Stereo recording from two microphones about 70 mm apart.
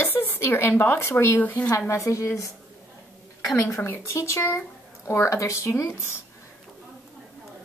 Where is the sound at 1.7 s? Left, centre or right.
Left.